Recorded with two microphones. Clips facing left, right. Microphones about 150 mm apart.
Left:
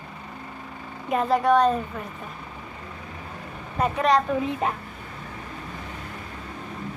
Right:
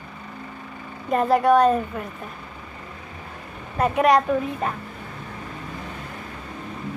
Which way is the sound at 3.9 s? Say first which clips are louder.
Right 4 dB; 15° right (ahead or behind).